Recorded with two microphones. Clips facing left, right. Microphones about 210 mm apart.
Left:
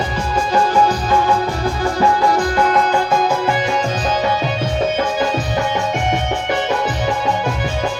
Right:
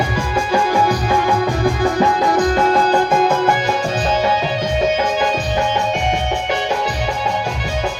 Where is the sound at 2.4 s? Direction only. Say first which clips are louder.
Right 2 dB; 25° right (ahead or behind).